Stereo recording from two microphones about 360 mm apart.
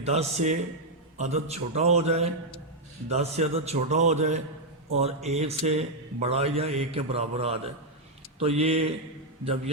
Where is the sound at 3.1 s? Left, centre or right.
Centre.